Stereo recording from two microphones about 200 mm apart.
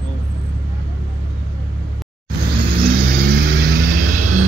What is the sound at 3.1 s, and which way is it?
Vehicle, 50° right (ahead or behind).